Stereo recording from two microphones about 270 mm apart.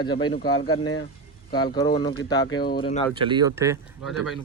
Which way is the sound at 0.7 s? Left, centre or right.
Left.